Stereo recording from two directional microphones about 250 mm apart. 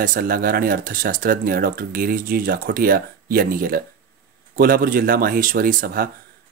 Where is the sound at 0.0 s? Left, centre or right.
Right.